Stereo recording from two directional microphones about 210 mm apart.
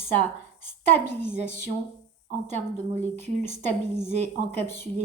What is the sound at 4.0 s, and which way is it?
Speech, 35° right (ahead or behind).